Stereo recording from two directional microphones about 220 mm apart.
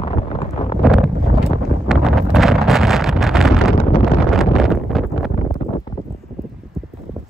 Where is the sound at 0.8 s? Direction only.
Centre (ahead or behind).